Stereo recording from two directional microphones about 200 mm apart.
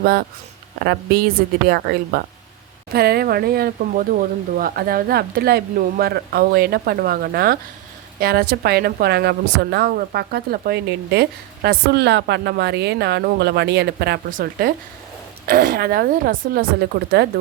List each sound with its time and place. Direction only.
0.0 s a woman's voice: 50° right (ahead or behind)